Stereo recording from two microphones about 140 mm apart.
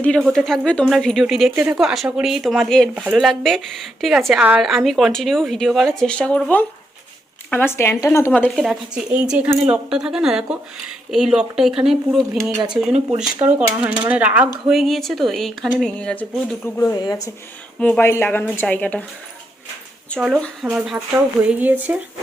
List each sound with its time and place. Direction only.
0.0 s speech: 5° left (ahead or behind); by 8.3 s 20° left (ahead or behind)
8.5 s a woman's voice: 5° right (ahead or behind); by 16.9 s 15° left (ahead or behind)
16.9 s speech: 30° left (ahead or behind)
17.7 s a woman's voice: 10° left (ahead or behind)
20.1 s a woman's voice: 5° right (ahead or behind)